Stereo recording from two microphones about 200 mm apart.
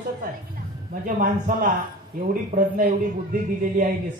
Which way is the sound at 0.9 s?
45° right (ahead or behind).